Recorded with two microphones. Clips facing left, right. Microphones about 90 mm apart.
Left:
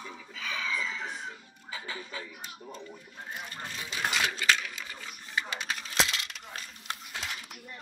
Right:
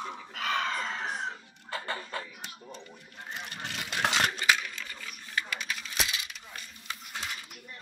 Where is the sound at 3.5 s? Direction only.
75° right (ahead or behind).